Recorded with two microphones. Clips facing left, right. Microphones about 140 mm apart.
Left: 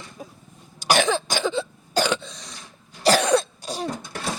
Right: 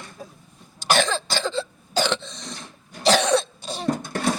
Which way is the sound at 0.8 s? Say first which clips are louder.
Left 1 dB; 15° left (ahead or behind).